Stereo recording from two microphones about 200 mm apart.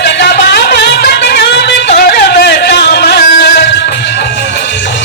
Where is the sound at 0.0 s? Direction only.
55° left (ahead or behind).